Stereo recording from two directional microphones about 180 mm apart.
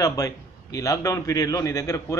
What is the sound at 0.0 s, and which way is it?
A man's voice, 20° left (ahead or behind).